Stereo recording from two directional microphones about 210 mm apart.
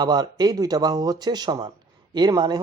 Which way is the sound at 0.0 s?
20° right (ahead or behind).